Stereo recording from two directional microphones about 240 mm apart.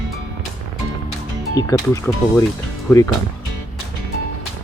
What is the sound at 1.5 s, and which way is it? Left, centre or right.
Speech, centre.